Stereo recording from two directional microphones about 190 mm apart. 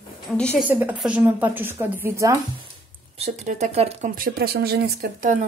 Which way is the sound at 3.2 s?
40° right (ahead or behind).